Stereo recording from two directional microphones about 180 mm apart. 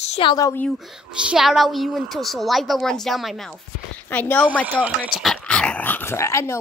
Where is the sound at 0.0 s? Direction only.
35° left (ahead or behind).